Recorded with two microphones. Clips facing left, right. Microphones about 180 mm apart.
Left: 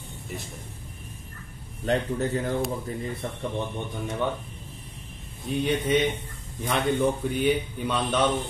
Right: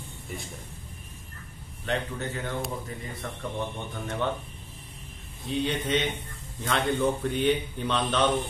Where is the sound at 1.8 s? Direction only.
35° left (ahead or behind).